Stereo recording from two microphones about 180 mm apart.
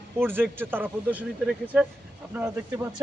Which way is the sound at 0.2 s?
10° right (ahead or behind).